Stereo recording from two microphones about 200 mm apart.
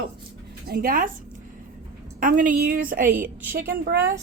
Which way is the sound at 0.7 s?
45° right (ahead or behind).